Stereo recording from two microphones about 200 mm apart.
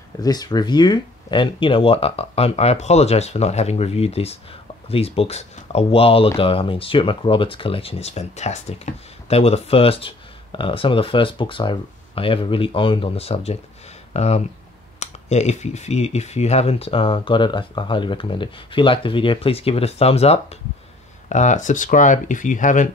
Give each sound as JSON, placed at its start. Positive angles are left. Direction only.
{"t": 0.2, "sound": "speech", "side_deg": 20}